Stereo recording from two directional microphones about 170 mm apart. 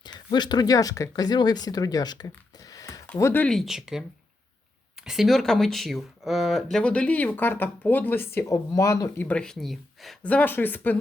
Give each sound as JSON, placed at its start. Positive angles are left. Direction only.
{"t": 0.0, "sound": "speech", "side_deg": 25}
{"t": 5.0, "sound": "speech", "side_deg": 0}